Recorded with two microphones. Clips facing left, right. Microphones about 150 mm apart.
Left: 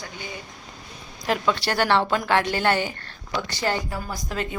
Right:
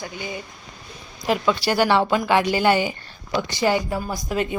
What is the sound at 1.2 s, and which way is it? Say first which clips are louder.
Speech: right 3 dB; 5° right (ahead or behind).